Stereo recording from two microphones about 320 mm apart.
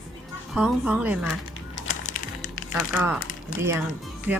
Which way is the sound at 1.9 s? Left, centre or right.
Left.